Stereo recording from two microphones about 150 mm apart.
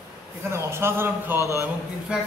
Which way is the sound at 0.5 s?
15° right (ahead or behind).